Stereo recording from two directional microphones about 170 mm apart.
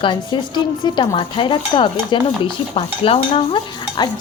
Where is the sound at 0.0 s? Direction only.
25° left (ahead or behind).